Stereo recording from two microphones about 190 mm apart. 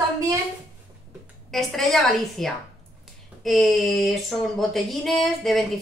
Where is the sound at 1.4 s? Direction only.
Centre (ahead or behind).